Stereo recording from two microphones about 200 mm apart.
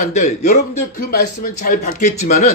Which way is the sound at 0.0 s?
35° left (ahead or behind).